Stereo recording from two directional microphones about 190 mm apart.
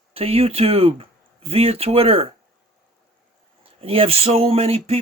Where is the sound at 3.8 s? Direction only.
30° right (ahead or behind).